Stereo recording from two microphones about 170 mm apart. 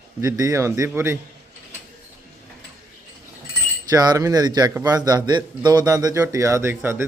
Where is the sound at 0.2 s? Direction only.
20° right (ahead or behind).